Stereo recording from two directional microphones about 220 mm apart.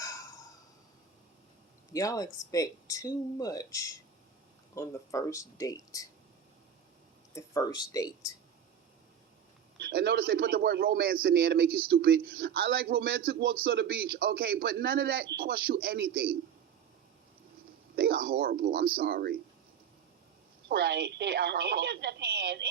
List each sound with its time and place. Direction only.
0.0 s a sound: 15° left (ahead or behind)
1.9 s speech: 15° left (ahead or behind)
7.3 s speech: 15° left (ahead or behind)
9.7 s speech: 50° right (ahead or behind)
17.9 s speech: 40° right (ahead or behind)
20.7 s speech: 45° right (ahead or behind)